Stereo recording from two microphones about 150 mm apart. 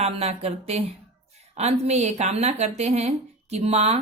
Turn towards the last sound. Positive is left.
turn(degrees=-45)  # may be behind; listen again after turning